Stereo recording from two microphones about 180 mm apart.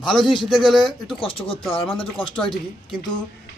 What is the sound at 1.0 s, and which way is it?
Speech, 30° left (ahead or behind).